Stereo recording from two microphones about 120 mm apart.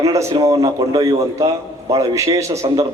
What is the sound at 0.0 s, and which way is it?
A man's voice, 25° right (ahead or behind).